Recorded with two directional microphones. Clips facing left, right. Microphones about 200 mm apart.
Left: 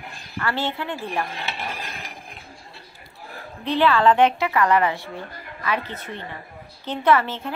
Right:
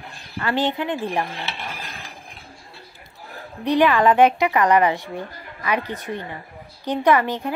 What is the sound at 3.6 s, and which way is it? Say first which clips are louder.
Speech: right 2 dB; 15° right (ahead or behind).